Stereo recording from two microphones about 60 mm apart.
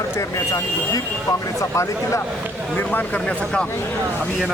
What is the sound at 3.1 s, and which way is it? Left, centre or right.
Speech, centre.